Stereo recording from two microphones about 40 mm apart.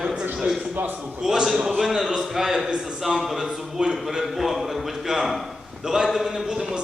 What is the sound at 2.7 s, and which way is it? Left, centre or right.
A man's voice, centre.